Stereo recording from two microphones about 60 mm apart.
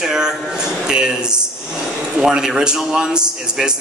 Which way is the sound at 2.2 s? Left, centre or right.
Centre.